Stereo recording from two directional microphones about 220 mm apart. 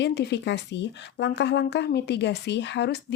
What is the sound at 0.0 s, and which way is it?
Speech, 50° left (ahead or behind).